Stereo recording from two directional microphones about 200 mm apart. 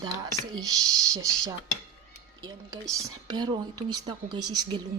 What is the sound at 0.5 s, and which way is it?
Speech, 20° right (ahead or behind).